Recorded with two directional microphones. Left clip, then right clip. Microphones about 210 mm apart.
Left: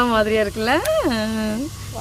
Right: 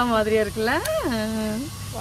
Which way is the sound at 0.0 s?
50° left (ahead or behind).